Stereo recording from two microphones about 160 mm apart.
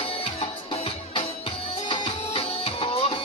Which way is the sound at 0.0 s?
35° left (ahead or behind).